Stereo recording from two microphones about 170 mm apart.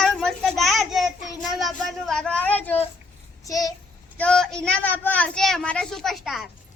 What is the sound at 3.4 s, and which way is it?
Child singing, 20° left (ahead or behind).